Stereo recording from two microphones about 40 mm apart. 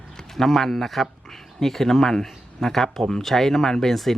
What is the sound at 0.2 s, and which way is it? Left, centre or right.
A man's voice, centre.